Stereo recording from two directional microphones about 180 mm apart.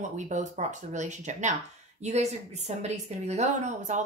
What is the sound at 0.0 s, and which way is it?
A woman's voice, 40° right (ahead or behind).